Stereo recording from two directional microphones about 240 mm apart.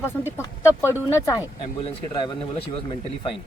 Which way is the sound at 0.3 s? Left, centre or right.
Centre.